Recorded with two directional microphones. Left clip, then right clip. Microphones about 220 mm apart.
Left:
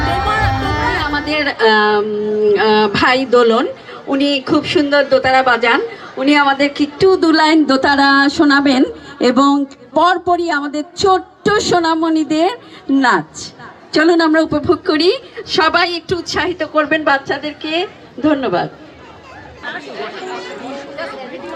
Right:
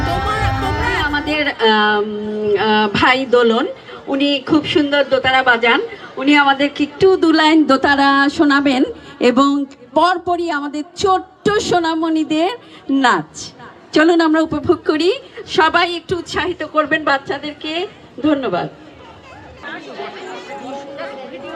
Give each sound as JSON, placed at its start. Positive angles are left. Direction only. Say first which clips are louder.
{"t": 0.5, "sound": "music", "louder": "left 2 dB", "side_deg": 25}
{"t": 0.9, "sound": "a sound", "louder": "left 1 dB", "side_deg": 35}
{"t": 4.1, "sound": "a woman's voice", "louder": "left 1 dB", "side_deg": 40}